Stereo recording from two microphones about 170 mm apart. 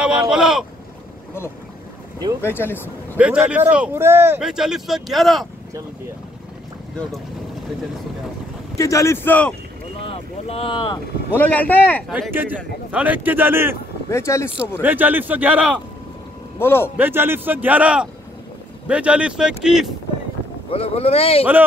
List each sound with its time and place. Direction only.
0.0 s speech: 5° right (ahead or behind)
2.4 s speech: 15° left (ahead or behind)
3.2 s speech: 5° right (ahead or behind)
4.4 s speech: 5° right (ahead or behind)
8.7 s speech: 20° left (ahead or behind)
10.0 s speech: 30° left (ahead or behind)
11.3 s speech: 10° left (ahead or behind)
12.1 s speech: 10° right (ahead or behind)
14.1 s speech: 15° left (ahead or behind)
14.8 s speech: 10° right (ahead or behind)
16.5 s speech: 15° left (ahead or behind)
16.9 s speech: 10° right (ahead or behind)
20.7 s speech: 35° left (ahead or behind)